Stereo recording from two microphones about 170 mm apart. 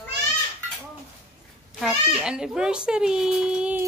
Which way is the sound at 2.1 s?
5° right (ahead or behind).